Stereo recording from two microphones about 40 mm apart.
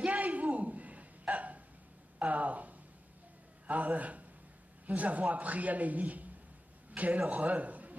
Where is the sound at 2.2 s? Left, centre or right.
Right.